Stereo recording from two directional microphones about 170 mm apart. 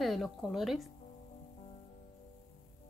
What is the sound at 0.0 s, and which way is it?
Speech, centre (ahead or behind).